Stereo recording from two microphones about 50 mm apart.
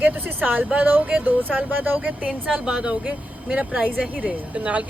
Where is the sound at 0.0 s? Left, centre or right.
Right.